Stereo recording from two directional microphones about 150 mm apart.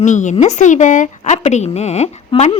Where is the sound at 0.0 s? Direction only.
55° left (ahead or behind).